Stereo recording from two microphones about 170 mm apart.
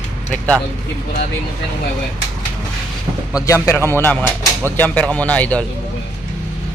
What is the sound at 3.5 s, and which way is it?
Speech, 15° left (ahead or behind).